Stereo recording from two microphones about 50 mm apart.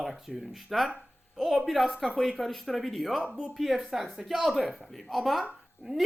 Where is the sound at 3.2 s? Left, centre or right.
Centre.